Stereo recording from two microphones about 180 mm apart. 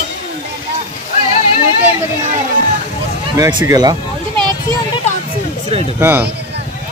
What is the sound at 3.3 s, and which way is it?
Speech, 20° right (ahead or behind).